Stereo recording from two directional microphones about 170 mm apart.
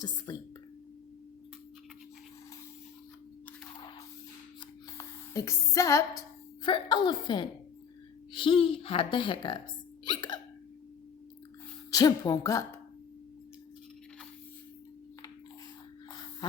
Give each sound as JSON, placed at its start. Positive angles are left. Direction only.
{"t": 0.3, "sound": "a woman's voice", "side_deg": 20}
{"t": 4.9, "sound": "a woman's voice", "side_deg": 15}
{"t": 10.1, "sound": "hiccup", "side_deg": 25}
{"t": 11.9, "sound": "speech", "side_deg": 20}